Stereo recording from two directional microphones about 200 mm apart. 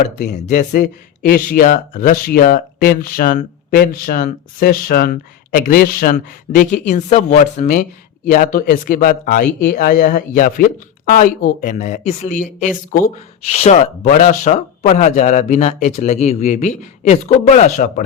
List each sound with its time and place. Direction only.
0.2 s speech: 35° left (ahead or behind)